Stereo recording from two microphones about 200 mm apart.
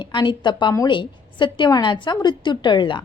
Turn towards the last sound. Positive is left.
turn(degrees=25)  # may be behind; listen again after turning